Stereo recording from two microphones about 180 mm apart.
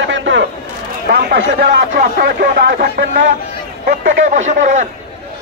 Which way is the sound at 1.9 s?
55° right (ahead or behind).